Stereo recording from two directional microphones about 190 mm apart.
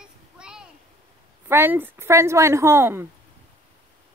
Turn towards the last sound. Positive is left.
turn(degrees=-10)  # may be behind; listen again after turning